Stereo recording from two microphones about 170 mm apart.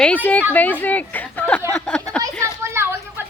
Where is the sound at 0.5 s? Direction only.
10° left (ahead or behind).